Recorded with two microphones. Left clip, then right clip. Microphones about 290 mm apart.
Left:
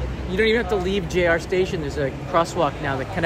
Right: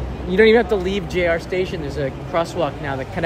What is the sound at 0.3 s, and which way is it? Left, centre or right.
Speech, centre.